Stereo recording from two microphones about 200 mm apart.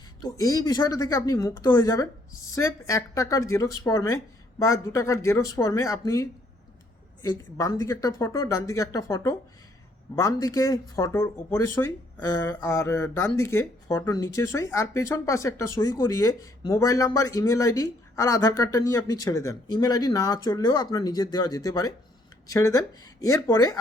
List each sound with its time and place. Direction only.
0.2 s speech: 15° left (ahead or behind)
2.3 s speech: 90° left
2.6 s speech: 15° left (ahead or behind)